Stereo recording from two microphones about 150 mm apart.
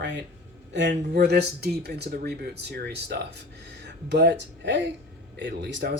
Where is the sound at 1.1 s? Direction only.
90° right.